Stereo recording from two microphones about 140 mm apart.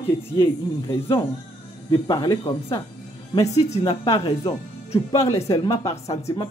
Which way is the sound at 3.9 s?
45° left (ahead or behind).